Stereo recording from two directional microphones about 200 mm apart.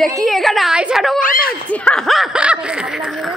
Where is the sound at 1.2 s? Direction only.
45° left (ahead or behind).